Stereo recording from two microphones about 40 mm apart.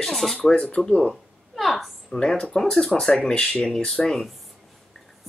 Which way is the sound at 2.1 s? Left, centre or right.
Left.